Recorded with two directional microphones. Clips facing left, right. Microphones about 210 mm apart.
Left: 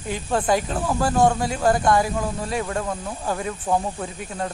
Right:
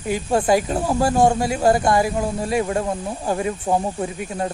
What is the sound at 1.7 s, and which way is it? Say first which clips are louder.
Speech: right 1 dB; 10° right (ahead or behind).